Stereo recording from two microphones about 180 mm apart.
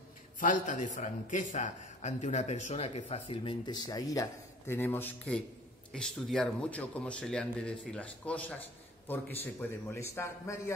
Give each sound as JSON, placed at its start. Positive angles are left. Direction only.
{"t": 0.4, "sound": "a man's voice", "side_deg": 45}